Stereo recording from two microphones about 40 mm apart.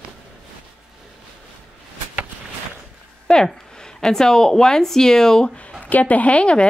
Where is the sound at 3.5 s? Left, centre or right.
Centre.